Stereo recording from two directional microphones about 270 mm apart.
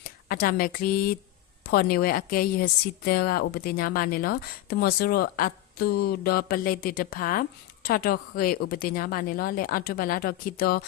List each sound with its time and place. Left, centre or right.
0.0 s a woman's voice: left